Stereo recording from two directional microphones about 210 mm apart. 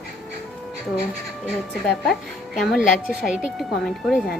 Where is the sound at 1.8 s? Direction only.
Centre (ahead or behind).